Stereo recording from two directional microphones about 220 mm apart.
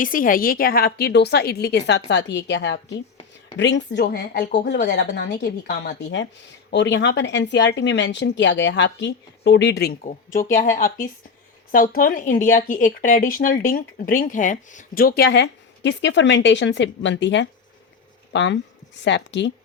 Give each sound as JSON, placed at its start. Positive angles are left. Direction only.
{"t": 0.0, "sound": "speech", "side_deg": 40}
{"t": 2.9, "sound": "a sound", "side_deg": 25}
{"t": 3.6, "sound": "speech", "side_deg": 55}
{"t": 10.3, "sound": "speech", "side_deg": 35}